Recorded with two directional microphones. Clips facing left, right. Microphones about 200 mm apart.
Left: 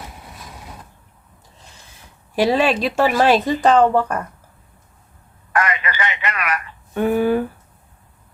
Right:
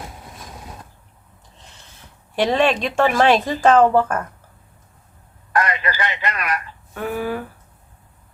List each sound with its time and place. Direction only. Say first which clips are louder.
2.3 s speech: left 1 dB; 5° left (ahead or behind)
5.5 s telephone: even; 35° right (ahead or behind)
6.9 s speech: left 7 dB; 25° left (ahead or behind)